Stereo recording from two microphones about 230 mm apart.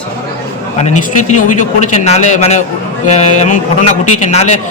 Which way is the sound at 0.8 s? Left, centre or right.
Left.